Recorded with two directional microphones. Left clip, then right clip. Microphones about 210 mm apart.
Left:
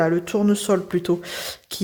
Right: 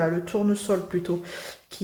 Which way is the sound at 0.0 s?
50° left (ahead or behind).